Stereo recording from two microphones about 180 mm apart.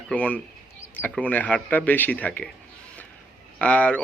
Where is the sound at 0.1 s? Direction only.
5° left (ahead or behind).